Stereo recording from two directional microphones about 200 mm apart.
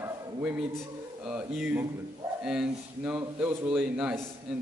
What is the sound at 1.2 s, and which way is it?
A man's voice, 5° right (ahead or behind).